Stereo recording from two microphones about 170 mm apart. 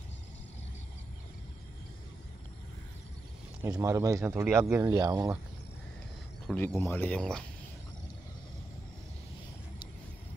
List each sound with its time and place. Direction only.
3.6 s speech: 20° right (ahead or behind)
6.4 s speech: 10° left (ahead or behind)